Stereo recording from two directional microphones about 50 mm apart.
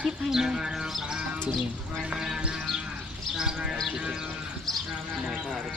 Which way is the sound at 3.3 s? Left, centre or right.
Centre.